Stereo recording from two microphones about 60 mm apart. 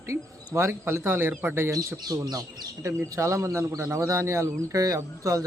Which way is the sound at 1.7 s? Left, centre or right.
Right.